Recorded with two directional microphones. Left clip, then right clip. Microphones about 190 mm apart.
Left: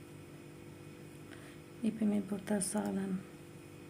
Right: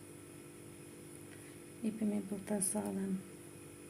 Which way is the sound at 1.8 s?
20° left (ahead or behind).